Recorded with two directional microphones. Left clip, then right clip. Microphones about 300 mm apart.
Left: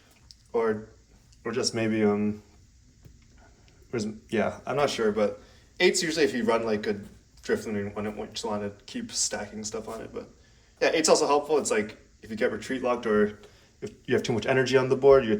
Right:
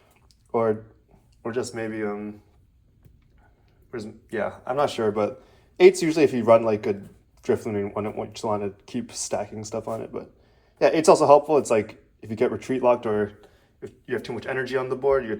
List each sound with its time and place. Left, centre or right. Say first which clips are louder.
0.3 s a sound: right 3 dB; right
1.4 s speech: even; centre
3.9 s speech: left 1 dB; centre
13.7 s speech: left 3 dB; centre